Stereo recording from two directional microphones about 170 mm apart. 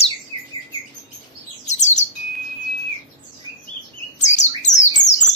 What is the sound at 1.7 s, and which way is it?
Bird, 45° left (ahead or behind).